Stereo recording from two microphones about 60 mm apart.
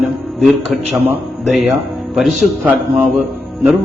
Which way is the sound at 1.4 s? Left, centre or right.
Centre.